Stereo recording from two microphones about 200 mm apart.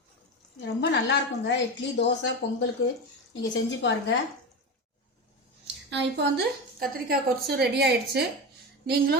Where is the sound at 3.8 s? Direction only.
60° left (ahead or behind).